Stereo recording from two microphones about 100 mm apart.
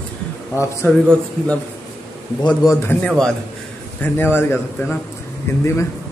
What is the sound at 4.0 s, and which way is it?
A man's voice, 20° left (ahead or behind).